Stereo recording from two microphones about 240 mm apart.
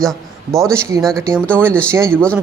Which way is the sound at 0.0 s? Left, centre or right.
Centre.